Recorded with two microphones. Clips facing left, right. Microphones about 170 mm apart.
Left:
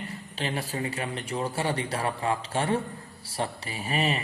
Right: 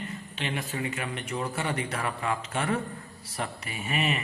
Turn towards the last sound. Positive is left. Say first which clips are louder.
# left 2 dB
turn(degrees=35)  # may be behind; listen again after turning